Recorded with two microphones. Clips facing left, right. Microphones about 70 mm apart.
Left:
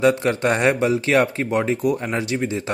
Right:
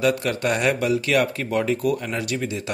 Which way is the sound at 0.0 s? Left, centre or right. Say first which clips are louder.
Left 4 dB; left.